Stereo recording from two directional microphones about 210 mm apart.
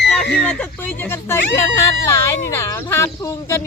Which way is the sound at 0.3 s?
5° left (ahead or behind).